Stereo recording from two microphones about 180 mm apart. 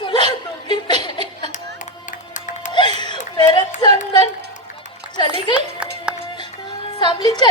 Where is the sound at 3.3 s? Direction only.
25° left (ahead or behind).